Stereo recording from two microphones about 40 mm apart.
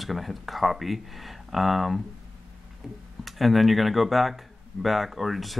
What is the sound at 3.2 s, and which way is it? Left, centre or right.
Speech, centre.